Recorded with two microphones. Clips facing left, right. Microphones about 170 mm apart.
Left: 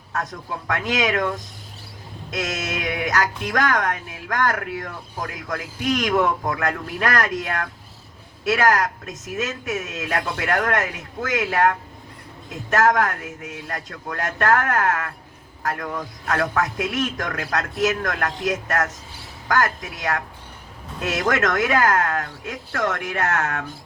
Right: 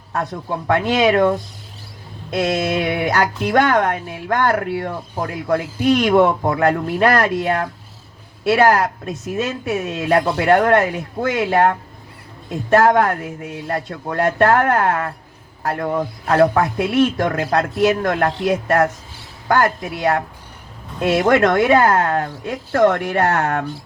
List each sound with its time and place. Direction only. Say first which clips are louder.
0.1 s speech: right 5 dB; 30° right (ahead or behind)